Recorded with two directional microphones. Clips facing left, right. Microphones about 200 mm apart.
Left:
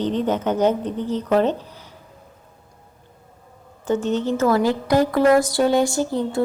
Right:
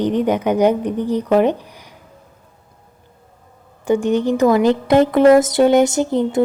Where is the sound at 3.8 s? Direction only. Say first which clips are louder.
Right 5 dB; 15° right (ahead or behind).